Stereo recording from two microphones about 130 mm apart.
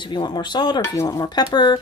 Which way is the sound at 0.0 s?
35° left (ahead or behind).